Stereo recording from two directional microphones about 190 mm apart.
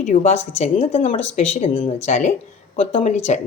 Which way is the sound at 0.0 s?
40° left (ahead or behind).